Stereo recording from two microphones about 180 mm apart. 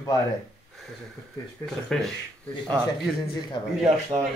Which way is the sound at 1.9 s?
5° left (ahead or behind).